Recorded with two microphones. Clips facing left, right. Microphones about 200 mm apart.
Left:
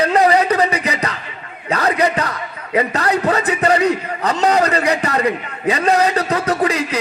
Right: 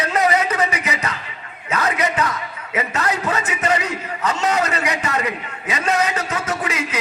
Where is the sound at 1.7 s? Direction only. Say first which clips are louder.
Left 4 dB; 35° left (ahead or behind).